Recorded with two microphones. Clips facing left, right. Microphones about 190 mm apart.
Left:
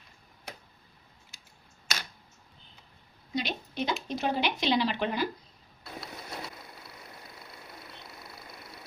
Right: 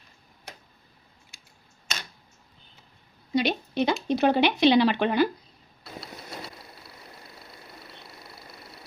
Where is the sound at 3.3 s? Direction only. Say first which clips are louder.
Right 8 dB; 70° right (ahead or behind).